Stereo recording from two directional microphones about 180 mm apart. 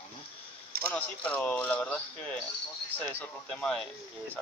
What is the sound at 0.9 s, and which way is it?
Speech, 10° left (ahead or behind).